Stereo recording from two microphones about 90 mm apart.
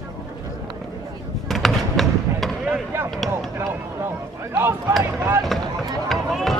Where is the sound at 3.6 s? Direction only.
30° right (ahead or behind).